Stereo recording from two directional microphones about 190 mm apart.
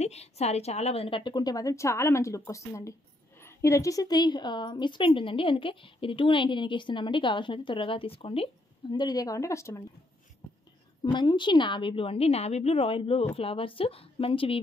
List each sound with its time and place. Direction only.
0.0 s a woman's voice: 35° left (ahead or behind); by 9.8 s 15° left (ahead or behind)
11.0 s a woman's voice: 25° left (ahead or behind)